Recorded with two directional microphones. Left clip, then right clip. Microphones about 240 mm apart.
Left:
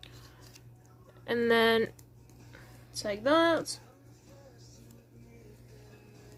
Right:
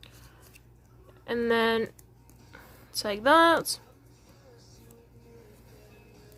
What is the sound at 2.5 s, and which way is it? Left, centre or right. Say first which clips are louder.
Speech: right 6 dB; right.